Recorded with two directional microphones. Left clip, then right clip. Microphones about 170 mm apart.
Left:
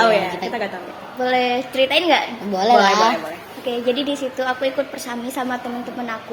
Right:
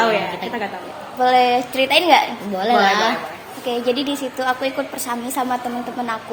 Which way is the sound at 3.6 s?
20° right (ahead or behind).